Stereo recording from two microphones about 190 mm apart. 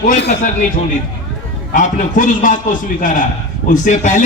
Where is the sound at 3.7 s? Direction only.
40° left (ahead or behind).